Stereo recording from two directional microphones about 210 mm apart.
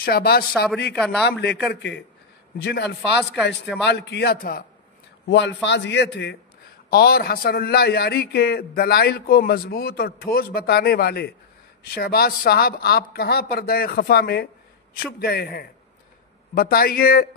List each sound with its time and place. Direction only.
0.0 s a man's voice: 45° left (ahead or behind)
0.9 s a man's voice: centre (ahead or behind)
1.2 s a man's voice: 50° left (ahead or behind)
5.3 s a man's voice: 60° left (ahead or behind)